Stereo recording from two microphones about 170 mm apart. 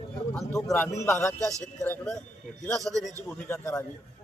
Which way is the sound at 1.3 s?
20° right (ahead or behind).